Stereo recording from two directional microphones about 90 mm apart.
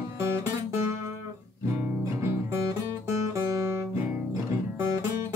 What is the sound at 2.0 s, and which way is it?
Music, 30° right (ahead or behind).